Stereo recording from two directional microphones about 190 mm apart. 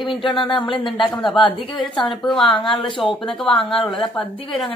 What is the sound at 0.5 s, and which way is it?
Speech, 25° left (ahead or behind).